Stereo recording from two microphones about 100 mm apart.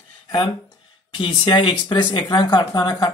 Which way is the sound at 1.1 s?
55° left (ahead or behind).